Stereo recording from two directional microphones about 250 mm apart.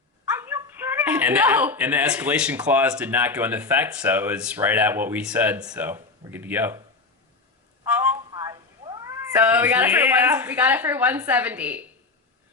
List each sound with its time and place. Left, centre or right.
0.3 s speech: centre
7.9 s speech: centre